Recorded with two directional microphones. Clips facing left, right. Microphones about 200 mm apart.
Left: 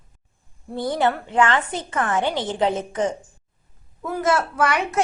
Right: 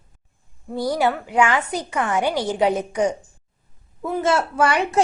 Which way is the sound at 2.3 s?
20° left (ahead or behind).